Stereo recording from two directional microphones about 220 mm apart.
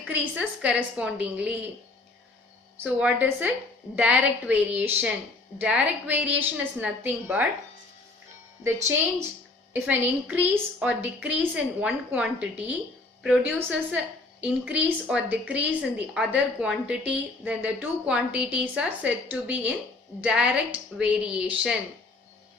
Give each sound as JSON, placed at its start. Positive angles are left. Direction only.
{"t": 0.1, "sound": "a woman's voice", "side_deg": -5}
{"t": 2.8, "sound": "a woman's voice", "side_deg": -5}
{"t": 9.7, "sound": "a woman's voice", "side_deg": -10}